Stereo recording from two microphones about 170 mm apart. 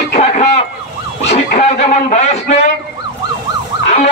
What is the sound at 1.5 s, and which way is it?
Speech, 40° left (ahead or behind).